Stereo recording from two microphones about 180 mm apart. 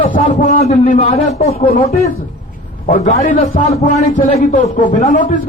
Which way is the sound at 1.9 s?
35° left (ahead or behind).